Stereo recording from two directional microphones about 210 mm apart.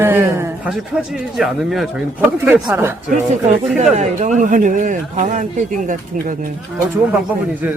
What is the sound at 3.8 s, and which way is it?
A man's voice, 35° right (ahead or behind).